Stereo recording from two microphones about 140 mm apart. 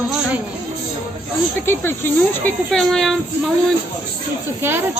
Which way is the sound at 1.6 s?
15° left (ahead or behind).